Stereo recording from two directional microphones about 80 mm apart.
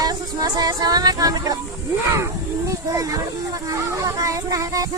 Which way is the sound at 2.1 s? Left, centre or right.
Right.